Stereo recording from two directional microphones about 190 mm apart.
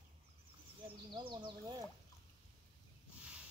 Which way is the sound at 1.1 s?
25° right (ahead or behind).